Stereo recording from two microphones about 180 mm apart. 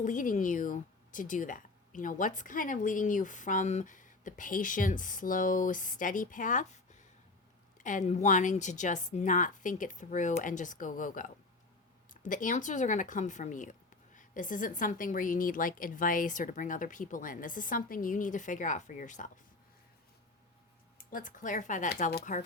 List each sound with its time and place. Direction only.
0.0 s speech: 45° left (ahead or behind)
21.0 s speech: 50° left (ahead or behind)